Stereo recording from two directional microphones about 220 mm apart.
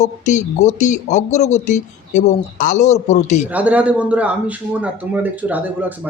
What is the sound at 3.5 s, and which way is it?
A man's voice, 5° right (ahead or behind).